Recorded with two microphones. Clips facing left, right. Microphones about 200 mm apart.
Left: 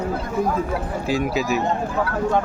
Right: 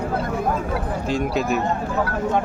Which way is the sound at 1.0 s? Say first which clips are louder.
Even; 5° left (ahead or behind).